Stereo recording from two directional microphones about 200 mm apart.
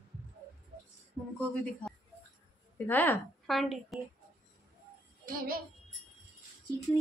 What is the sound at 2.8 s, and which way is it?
Speech, 10° left (ahead or behind).